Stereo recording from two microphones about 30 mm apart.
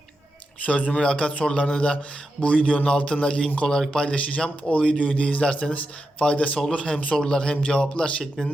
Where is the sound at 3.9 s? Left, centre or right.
Left.